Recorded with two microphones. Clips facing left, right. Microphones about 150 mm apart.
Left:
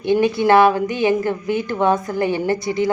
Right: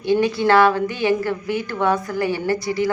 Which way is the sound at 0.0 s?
20° left (ahead or behind).